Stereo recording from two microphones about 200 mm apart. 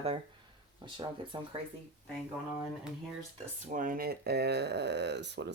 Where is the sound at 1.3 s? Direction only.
20° right (ahead or behind).